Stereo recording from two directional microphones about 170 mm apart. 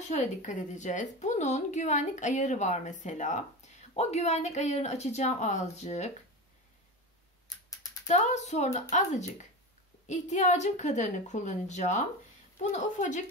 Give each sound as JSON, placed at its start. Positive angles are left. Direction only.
{"t": 0.1, "sound": "a woman's voice", "side_deg": 45}
{"t": 8.1, "sound": "a woman's voice", "side_deg": 45}